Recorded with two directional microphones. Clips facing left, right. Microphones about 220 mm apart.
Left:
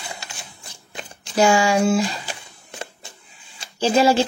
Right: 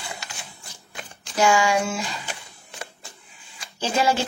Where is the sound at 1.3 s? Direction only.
30° left (ahead or behind).